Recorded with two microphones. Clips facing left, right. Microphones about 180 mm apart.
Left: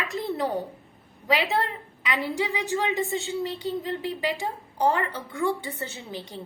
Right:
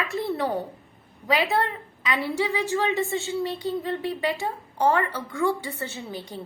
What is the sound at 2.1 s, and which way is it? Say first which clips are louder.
A woman's voice: right 2 dB; 15° left (ahead or behind).